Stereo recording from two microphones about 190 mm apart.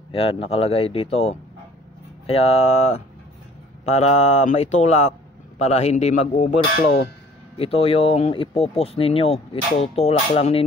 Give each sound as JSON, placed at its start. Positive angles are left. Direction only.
{"t": 0.1, "sound": "speech", "side_deg": 30}
{"t": 7.5, "sound": "speech", "side_deg": 30}